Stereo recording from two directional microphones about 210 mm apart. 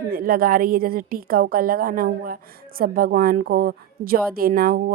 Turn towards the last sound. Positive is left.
turn(degrees=-45)  # may be behind; listen again after turning